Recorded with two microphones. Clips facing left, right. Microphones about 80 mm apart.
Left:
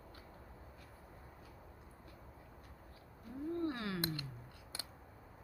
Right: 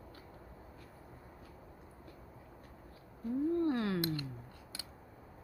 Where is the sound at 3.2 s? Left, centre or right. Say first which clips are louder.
Right 7 dB; right.